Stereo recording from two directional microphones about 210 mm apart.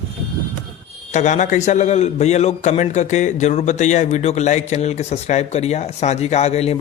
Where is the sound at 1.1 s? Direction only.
35° left (ahead or behind).